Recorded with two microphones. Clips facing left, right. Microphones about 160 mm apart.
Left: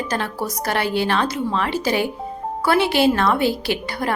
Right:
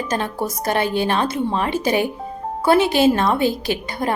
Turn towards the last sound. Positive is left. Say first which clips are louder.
# right 1 dB
turn(degrees=-20)  # may be behind; listen again after turning